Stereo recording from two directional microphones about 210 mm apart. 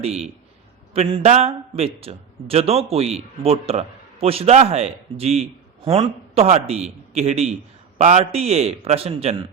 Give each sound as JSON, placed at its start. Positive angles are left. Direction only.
{"t": 0.0, "sound": "a man's voice", "side_deg": -30}